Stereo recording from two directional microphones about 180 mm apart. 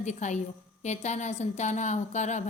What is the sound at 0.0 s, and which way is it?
A woman's voice, 40° left (ahead or behind).